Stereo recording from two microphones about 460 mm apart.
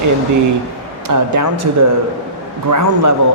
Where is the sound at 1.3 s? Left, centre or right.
Right.